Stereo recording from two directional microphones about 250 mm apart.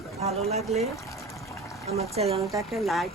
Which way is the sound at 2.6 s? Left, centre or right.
Centre.